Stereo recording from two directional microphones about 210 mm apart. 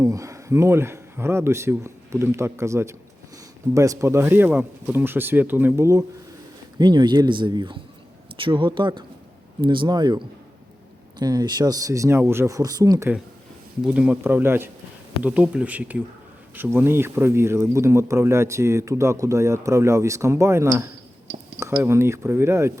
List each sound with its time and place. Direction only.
0.0 s speech: 15° right (ahead or behind)